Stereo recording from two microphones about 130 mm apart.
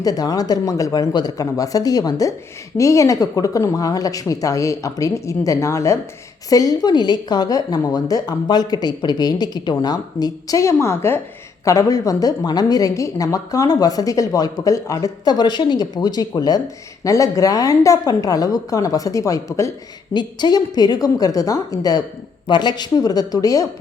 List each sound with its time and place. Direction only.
0.0 s a woman's voice: 30° left (ahead or behind)